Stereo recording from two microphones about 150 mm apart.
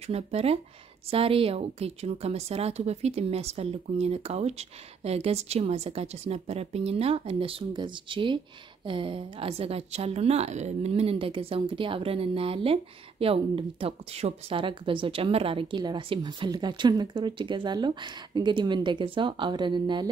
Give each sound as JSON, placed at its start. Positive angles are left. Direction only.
{"t": 0.0, "sound": "a woman's voice", "side_deg": -45}